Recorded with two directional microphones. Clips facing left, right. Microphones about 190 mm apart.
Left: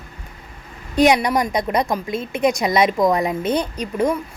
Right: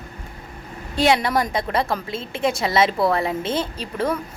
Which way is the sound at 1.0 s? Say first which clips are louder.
Left 3 dB; 15° left (ahead or behind).